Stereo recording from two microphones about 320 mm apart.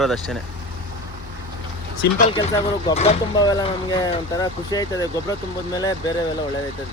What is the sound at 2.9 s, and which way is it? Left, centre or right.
Speech, centre.